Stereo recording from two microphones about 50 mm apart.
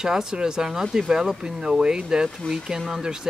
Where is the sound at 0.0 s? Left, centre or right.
Centre.